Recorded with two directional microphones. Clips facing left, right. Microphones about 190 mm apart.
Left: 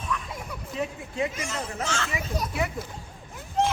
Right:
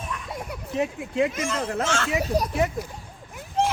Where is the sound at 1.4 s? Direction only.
60° right (ahead or behind); by 2.7 s 40° right (ahead or behind).